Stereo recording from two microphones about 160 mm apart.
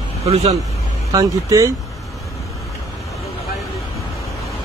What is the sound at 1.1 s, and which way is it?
Speech, 20° right (ahead or behind).